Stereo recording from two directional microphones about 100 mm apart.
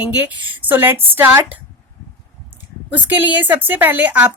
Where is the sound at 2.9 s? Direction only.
15° right (ahead or behind).